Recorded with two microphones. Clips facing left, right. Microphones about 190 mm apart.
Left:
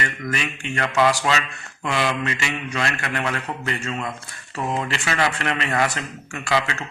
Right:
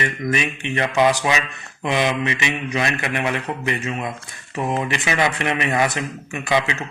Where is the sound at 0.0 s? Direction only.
20° right (ahead or behind).